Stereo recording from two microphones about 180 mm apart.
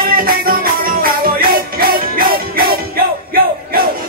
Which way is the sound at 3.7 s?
55° right (ahead or behind).